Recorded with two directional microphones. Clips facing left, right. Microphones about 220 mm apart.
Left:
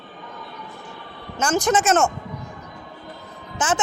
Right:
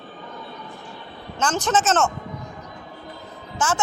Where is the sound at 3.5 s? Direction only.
20° left (ahead or behind).